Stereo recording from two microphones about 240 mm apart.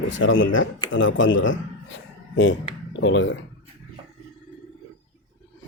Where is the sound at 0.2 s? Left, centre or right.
Left.